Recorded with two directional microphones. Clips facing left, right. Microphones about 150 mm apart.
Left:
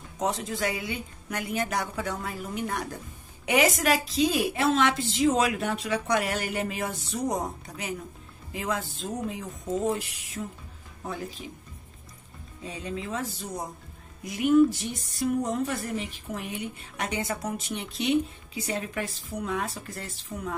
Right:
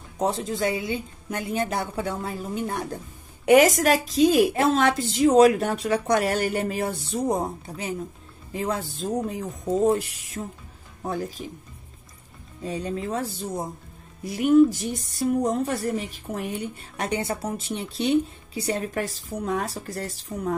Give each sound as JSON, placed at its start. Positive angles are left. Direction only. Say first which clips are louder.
{"t": 0.2, "sound": "a woman's voice", "louder": "right 4 dB", "side_deg": -30}
{"t": 3.4, "sound": "a woman's voice", "louder": "right 7 dB", "side_deg": -45}
{"t": 12.6, "sound": "a woman's voice", "louder": "right 6 dB", "side_deg": -40}
{"t": 13.2, "sound": "a woman's voice", "louder": "right 4 dB", "side_deg": -30}